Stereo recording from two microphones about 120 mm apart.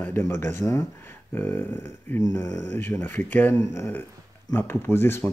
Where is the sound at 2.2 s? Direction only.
25° left (ahead or behind).